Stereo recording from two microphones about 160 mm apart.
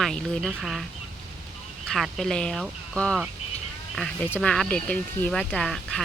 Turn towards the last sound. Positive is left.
turn(degrees=5)  # may be behind; listen again after turning